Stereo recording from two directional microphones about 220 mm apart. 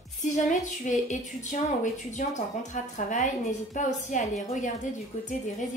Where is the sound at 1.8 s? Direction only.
35° left (ahead or behind).